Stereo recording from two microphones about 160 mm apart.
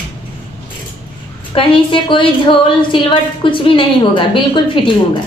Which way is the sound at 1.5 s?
30° left (ahead or behind).